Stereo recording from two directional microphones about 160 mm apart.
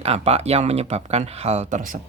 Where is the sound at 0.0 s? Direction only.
40° right (ahead or behind).